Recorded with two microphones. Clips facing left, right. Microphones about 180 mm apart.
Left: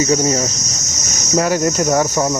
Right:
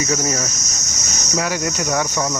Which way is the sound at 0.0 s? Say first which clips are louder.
Left 6 dB; 30° left (ahead or behind).